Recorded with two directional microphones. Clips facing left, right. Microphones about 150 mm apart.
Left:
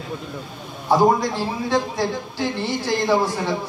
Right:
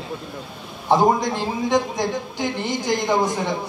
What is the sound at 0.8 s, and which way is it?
A man's voice, 20° right (ahead or behind).